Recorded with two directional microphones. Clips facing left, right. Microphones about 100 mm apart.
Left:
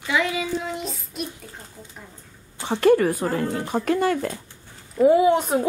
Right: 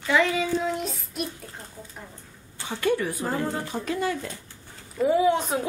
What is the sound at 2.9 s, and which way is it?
Speech, 45° left (ahead or behind).